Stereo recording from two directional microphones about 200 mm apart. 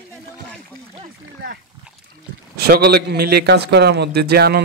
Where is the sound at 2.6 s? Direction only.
50° right (ahead or behind).